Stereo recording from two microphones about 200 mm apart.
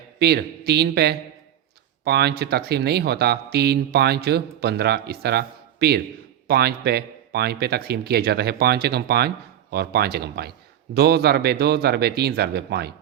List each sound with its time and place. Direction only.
0.2 s a man's voice: 55° right (ahead or behind)